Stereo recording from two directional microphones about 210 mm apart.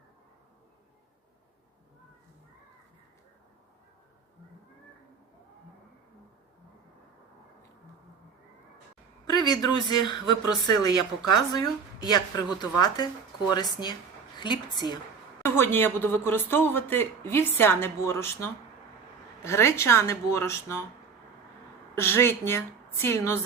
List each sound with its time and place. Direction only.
9.2 s speech: 20° left (ahead or behind)
21.9 s speech: 10° left (ahead or behind)